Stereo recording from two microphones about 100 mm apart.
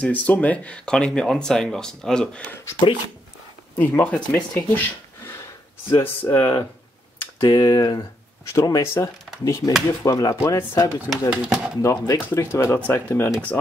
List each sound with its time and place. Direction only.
0.0 s speech: 15° left (ahead or behind)
3.7 s speech: 20° left (ahead or behind)
5.9 s speech: 20° left (ahead or behind)
7.4 s speech: 35° left (ahead or behind)
11.1 s speech: 5° right (ahead or behind)
11.8 s speech: 35° left (ahead or behind)